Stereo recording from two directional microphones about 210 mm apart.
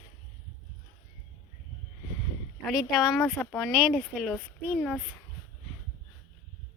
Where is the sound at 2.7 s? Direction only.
Centre (ahead or behind).